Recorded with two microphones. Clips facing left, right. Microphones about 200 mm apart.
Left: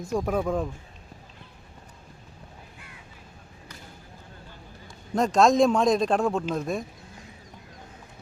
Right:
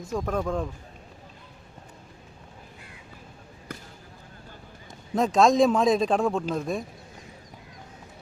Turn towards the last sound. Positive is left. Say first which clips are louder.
# even
turn(degrees=0)  # may be behind; listen again after turning